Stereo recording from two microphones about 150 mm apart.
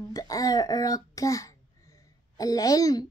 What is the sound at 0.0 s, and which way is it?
A child's voice, 25° left (ahead or behind).